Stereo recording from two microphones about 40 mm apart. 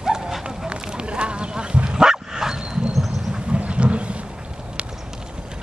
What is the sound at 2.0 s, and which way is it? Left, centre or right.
Bow-wow, centre.